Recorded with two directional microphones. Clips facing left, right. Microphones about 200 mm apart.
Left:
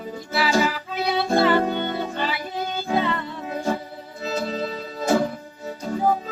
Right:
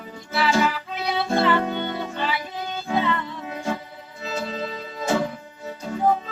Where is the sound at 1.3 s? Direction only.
35° left (ahead or behind).